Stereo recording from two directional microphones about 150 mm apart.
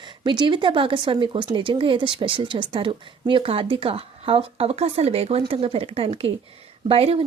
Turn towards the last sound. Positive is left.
turn(degrees=-40)  # may be behind; listen again after turning